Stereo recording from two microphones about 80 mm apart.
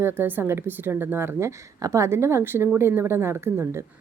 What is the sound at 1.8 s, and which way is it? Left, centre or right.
A woman's voice, right.